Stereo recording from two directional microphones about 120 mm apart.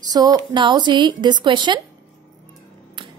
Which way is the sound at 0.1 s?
30° right (ahead or behind).